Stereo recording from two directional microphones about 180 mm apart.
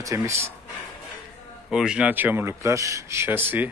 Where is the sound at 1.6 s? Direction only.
5° right (ahead or behind).